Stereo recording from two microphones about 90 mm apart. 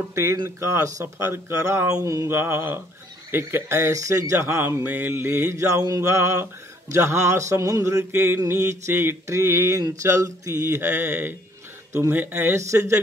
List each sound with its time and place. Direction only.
0.1 s mantra: 30° right (ahead or behind)
2.2 s speech: 25° right (ahead or behind)
4.8 s mantra: 20° right (ahead or behind)
10.9 s speech: 25° right (ahead or behind)